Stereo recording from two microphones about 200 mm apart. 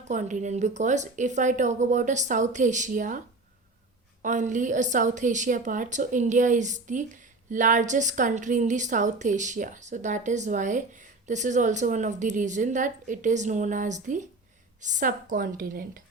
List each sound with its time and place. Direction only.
0.1 s a woman's voice: 40° right (ahead or behind)
4.2 s a woman's voice: 40° right (ahead or behind)